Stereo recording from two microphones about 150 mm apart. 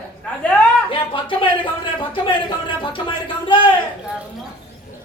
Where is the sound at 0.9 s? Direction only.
35° left (ahead or behind).